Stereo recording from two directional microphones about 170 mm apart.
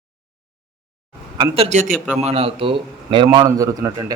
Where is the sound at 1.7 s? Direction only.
45° right (ahead or behind).